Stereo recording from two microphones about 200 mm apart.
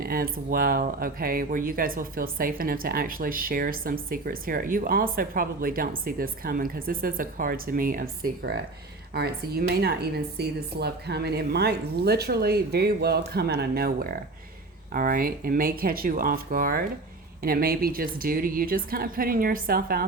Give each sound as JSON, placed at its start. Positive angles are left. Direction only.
{"t": 0.0, "sound": "speech", "side_deg": -45}